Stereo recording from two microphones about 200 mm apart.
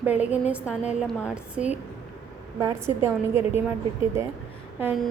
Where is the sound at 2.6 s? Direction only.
20° right (ahead or behind).